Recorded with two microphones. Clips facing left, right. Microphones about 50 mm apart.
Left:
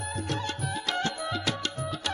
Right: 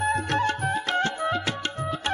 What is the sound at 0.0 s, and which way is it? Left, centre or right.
Music, right.